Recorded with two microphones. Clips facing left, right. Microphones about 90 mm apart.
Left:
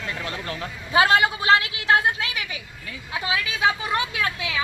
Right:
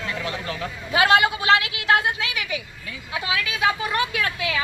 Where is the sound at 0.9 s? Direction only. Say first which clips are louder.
Even; 30° left (ahead or behind).